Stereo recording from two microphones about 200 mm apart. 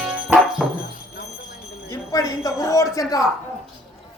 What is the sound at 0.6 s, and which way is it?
Music, centre (ahead or behind).